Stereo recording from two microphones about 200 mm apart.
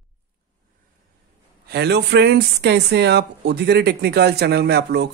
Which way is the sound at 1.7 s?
55° right (ahead or behind).